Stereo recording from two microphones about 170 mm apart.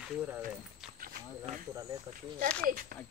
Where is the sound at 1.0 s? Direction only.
55° right (ahead or behind).